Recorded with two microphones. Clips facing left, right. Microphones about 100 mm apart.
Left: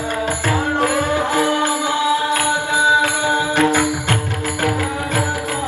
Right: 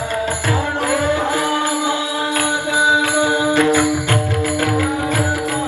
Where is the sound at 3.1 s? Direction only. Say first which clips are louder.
Right 2 dB; 20° right (ahead or behind).